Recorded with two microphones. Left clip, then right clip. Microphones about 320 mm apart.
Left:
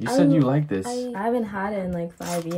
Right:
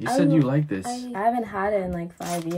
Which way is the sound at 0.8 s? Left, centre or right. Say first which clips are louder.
Right 2 dB; centre.